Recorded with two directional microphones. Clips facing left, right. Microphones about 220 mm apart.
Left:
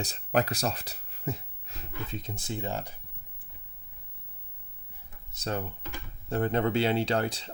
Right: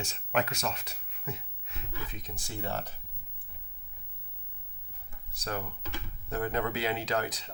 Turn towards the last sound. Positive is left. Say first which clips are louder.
# left 4 dB
turn(degrees=30)  # may be behind; listen again after turning